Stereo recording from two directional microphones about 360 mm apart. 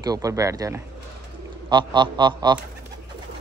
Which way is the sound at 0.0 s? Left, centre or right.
Centre.